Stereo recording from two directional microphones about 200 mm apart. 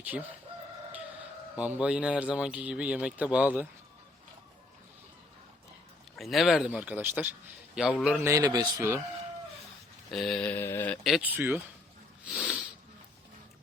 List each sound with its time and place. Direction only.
0.0 s chicken: 5° right (ahead or behind)
1.5 s a man's voice: 5° right (ahead or behind)
6.1 s a man's voice: centre (ahead or behind)
8.2 s a man's voice: 15° right (ahead or behind)
10.1 s a man's voice: centre (ahead or behind)